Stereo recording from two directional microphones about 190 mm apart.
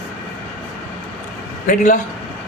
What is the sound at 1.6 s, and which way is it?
Speech, 40° left (ahead or behind).